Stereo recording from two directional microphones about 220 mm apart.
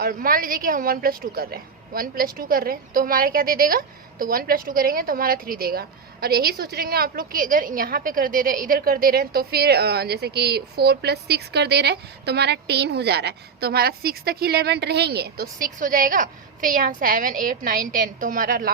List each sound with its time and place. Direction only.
0.0 s a woman's voice: 40° right (ahead or behind)